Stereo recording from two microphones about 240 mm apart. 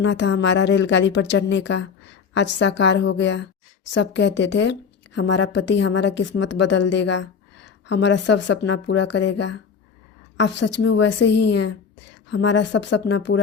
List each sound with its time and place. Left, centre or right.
0.0 s a woman's voice: left